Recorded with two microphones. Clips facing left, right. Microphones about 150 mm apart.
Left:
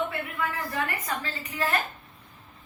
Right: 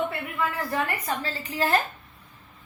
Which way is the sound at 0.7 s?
30° right (ahead or behind).